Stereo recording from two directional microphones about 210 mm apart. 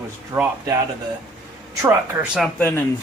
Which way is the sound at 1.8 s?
10° right (ahead or behind).